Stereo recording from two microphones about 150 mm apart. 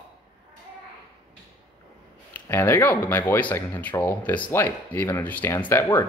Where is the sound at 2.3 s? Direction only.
15° left (ahead or behind).